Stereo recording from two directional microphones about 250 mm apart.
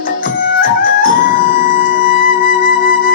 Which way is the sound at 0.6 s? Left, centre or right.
Left.